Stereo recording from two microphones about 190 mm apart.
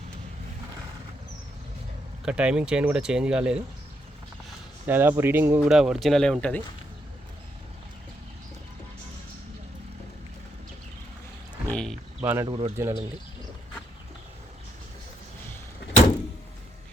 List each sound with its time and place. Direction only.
2.2 s speech: 5° right (ahead or behind)
4.9 s speech: 10° right (ahead or behind); by 6.6 s 5° left (ahead or behind)
11.7 s a sound: 5° left (ahead or behind)
12.2 s speech: 10° right (ahead or behind)
12.5 s speech: 25° right (ahead or behind)
12.7 s speech: 15° right (ahead or behind)